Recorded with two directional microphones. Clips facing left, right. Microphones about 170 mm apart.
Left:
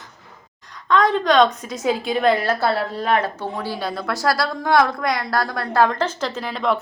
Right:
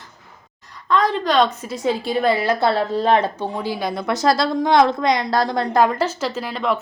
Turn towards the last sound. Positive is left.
turn(degrees=0)  # may be behind; listen again after turning